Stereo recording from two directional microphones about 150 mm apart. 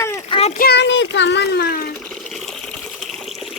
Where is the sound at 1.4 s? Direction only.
90° left.